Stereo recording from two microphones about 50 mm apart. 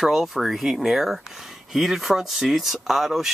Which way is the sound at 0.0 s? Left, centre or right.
Centre.